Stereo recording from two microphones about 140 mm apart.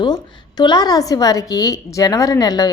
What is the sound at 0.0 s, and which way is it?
A woman's voice, 30° left (ahead or behind).